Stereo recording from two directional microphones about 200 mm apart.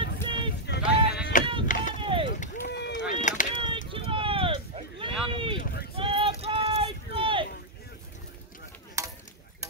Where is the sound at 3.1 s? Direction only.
40° left (ahead or behind).